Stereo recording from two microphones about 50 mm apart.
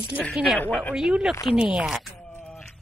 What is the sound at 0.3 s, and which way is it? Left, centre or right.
Speech, centre.